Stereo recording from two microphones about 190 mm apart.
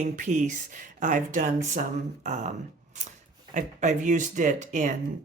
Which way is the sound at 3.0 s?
40° right (ahead or behind).